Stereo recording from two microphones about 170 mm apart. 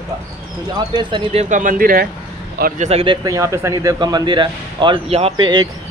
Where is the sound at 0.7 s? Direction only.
25° right (ahead or behind); by 2.0 s 55° right (ahead or behind).